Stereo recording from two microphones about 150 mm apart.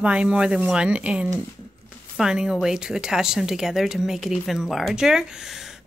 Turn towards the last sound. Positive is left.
turn(degrees=-5)  # may be behind; listen again after turning